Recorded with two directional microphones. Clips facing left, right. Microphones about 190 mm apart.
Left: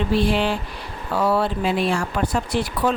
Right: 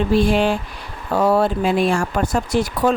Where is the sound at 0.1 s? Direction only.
45° right (ahead or behind).